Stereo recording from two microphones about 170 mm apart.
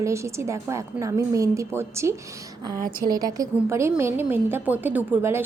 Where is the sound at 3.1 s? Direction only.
20° right (ahead or behind).